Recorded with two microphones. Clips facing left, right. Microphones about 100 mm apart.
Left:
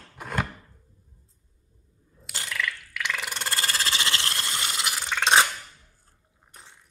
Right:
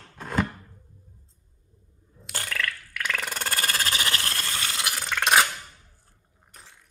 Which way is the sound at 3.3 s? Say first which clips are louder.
Right 1 dB; 25° left (ahead or behind).